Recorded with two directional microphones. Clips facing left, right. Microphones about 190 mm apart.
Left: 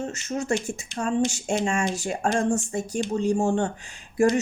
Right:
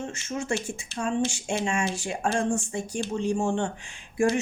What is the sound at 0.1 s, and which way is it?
A woman's voice, 40° left (ahead or behind).